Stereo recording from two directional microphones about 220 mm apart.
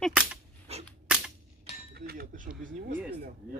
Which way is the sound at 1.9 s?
45° right (ahead or behind).